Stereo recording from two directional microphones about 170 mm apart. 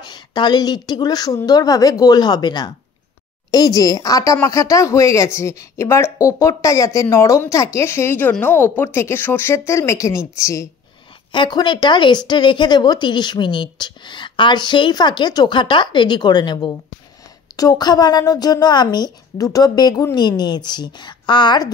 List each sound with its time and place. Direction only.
0.1 s a woman's voice: 25° left (ahead or behind)